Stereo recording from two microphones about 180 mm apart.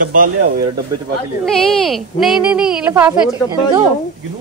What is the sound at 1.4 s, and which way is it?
A woman's voice, centre (ahead or behind).